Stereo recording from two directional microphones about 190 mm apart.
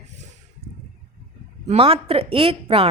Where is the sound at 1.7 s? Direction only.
30° right (ahead or behind).